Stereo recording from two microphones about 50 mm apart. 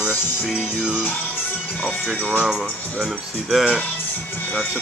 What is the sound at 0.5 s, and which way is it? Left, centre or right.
Music, centre.